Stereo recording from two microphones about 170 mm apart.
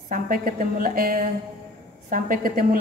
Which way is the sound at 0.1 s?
55° right (ahead or behind).